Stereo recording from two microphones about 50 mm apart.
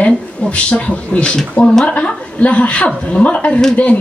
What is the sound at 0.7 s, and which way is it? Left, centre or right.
Speech, left.